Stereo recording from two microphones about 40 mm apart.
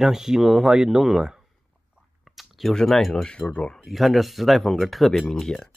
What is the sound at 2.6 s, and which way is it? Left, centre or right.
Speech, centre.